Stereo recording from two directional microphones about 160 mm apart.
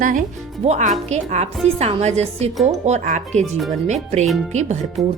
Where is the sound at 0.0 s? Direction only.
55° right (ahead or behind).